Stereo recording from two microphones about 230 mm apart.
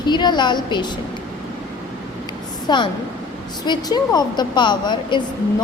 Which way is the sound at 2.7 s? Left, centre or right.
Centre.